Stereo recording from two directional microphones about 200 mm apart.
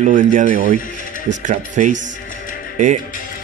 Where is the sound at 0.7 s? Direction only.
40° left (ahead or behind).